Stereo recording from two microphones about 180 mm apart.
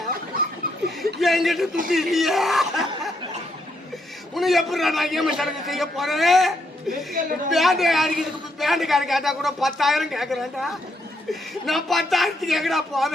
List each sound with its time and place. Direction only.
0.9 s a sound: centre (ahead or behind)
1.9 s speech: centre (ahead or behind)
4.4 s a man's voice: centre (ahead or behind)
7.2 s a woman's voice: 50° right (ahead or behind)
7.5 s a man's voice: centre (ahead or behind)